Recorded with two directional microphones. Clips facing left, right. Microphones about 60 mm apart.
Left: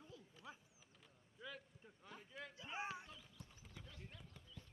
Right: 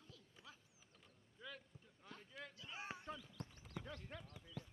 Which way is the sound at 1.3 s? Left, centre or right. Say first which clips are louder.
Left 1 dB; centre.